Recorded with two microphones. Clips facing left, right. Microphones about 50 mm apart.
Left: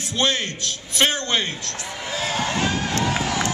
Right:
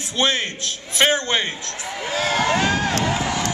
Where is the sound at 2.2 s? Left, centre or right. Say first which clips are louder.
Right 5 dB; right.